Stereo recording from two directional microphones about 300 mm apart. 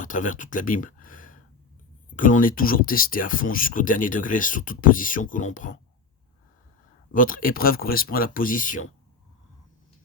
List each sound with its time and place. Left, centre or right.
0.0 s speech: left
7.1 s speech: left